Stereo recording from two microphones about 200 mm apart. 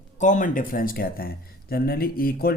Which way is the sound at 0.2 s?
40° left (ahead or behind).